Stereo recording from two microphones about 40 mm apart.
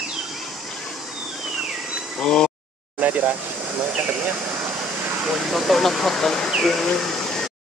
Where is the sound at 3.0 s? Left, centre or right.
Right.